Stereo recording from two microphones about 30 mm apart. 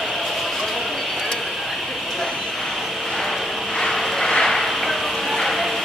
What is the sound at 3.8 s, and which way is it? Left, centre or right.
Vehicle, centre.